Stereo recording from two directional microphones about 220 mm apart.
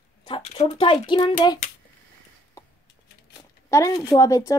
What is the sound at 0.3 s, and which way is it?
Speech, 20° left (ahead or behind).